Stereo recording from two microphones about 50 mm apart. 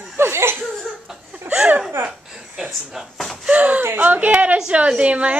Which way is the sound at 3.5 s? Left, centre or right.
Right.